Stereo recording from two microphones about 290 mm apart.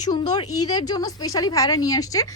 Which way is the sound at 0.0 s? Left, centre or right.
Centre.